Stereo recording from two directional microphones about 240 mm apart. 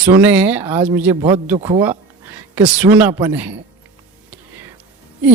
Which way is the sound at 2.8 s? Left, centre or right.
Centre.